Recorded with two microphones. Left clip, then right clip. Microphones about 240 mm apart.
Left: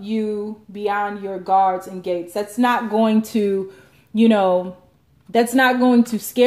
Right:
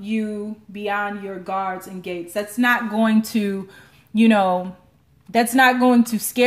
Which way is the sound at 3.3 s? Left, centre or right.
Right.